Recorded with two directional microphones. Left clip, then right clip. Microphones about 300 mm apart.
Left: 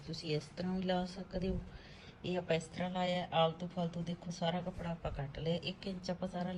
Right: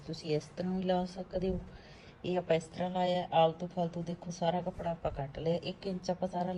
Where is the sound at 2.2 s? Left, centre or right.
Centre.